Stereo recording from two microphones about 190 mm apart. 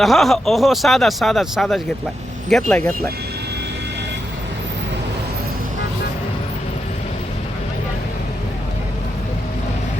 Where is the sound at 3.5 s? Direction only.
60° right (ahead or behind).